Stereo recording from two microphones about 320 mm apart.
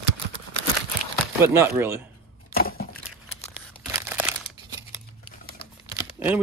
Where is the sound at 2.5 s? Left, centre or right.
Left.